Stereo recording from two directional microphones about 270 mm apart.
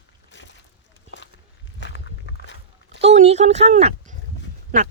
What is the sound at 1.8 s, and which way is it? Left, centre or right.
Walk, left.